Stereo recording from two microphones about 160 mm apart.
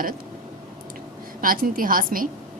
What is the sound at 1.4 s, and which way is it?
Speech, 60° right (ahead or behind).